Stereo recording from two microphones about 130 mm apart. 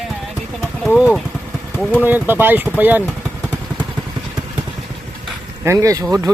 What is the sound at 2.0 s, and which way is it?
Speech, 15° right (ahead or behind).